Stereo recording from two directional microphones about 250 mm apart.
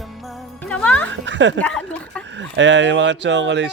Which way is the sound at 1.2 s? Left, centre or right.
Right.